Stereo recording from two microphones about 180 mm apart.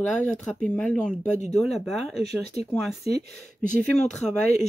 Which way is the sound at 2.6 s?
30° left (ahead or behind).